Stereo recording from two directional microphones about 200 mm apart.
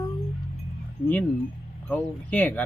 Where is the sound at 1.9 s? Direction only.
10° left (ahead or behind).